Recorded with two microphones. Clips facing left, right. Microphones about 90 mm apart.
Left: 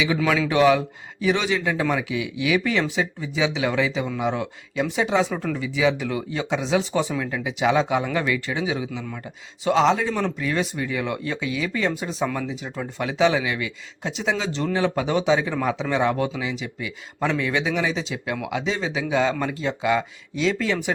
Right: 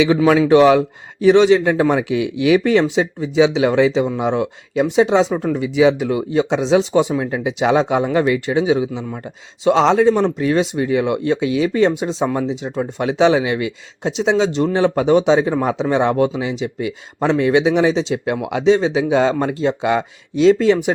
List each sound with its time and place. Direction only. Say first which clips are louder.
0.0 s speech: right 8 dB; 35° right (ahead or behind)
1.6 s a man's voice: right 7 dB; 40° right (ahead or behind)
2.8 s speech: right 7 dB; 20° right (ahead or behind)
3.6 s speech: right 9 dB; 40° right (ahead or behind)
11.5 s speech: right 9 dB; 35° right (ahead or behind)
11.9 s speech: right 7 dB; 25° right (ahead or behind)
17.3 s a man's voice: right 12 dB; 45° right (ahead or behind)
17.6 s speech: right 9 dB; 25° right (ahead or behind)
19.1 s speech: right 3 dB; 40° right (ahead or behind)